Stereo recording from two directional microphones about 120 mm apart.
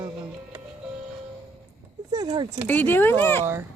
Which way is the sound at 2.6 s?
15° left (ahead or behind).